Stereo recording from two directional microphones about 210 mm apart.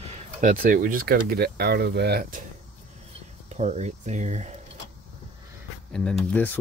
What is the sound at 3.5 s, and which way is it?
Speech, 35° right (ahead or behind).